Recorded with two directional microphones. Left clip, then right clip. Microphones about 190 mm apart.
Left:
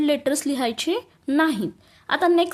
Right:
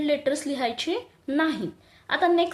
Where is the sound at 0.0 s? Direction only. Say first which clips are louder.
Left 3 dB; 40° left (ahead or behind).